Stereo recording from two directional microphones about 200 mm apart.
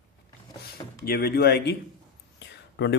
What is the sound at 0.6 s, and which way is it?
Speech, 50° left (ahead or behind).